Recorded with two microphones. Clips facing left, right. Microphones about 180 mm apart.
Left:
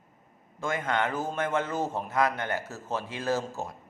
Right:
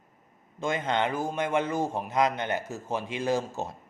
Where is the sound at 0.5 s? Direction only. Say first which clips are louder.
Right 1 dB; 20° right (ahead or behind).